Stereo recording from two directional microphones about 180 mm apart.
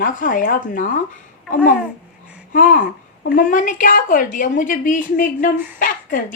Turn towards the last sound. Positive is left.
turn(degrees=50)  # may be behind; listen again after turning